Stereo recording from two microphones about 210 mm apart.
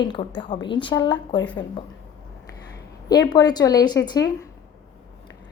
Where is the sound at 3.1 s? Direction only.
20° left (ahead or behind).